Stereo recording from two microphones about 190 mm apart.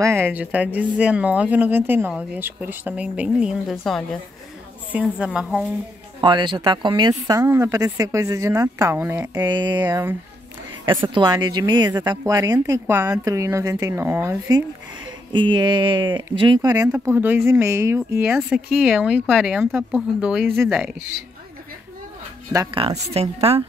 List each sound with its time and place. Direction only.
0.0 s a woman's voice: 10° right (ahead or behind)
6.2 s speech: 25° right (ahead or behind)
9.3 s speech: 25° right (ahead or behind)
15.3 s speech: 25° right (ahead or behind); by 20.9 s 5° right (ahead or behind)
22.8 s speech: 30° right (ahead or behind)